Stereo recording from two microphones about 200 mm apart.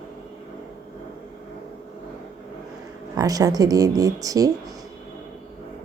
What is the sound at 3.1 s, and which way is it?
Speech, 20° right (ahead or behind).